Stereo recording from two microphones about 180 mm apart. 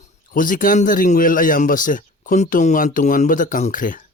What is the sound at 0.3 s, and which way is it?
Speech, 50° left (ahead or behind).